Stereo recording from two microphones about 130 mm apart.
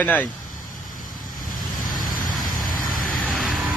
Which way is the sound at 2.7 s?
90° left.